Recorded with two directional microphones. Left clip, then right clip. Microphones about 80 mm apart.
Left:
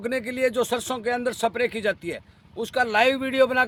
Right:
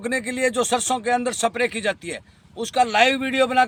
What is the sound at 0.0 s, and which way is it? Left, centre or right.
Speech, left.